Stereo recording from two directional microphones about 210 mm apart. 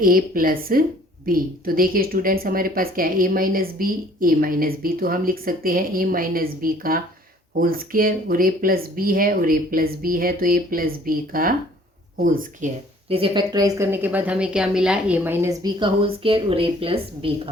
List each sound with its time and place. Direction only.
0.0 s a woman's voice: 45° right (ahead or behind)
13.1 s a woman's voice: 25° right (ahead or behind)